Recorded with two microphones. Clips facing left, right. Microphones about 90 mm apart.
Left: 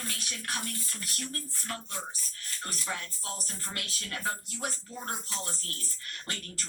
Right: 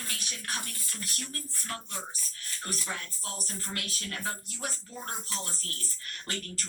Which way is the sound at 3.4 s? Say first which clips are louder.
Right 2 dB; 30° left (ahead or behind).